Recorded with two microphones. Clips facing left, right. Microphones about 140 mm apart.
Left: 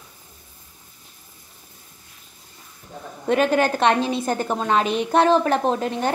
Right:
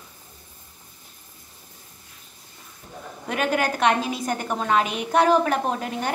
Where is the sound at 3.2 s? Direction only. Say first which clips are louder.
Left 5 dB; 30° left (ahead or behind).